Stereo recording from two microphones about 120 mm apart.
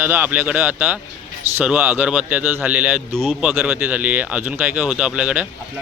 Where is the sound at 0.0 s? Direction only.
15° right (ahead or behind).